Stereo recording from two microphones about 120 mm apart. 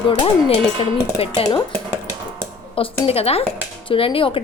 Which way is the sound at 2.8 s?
55° left (ahead or behind).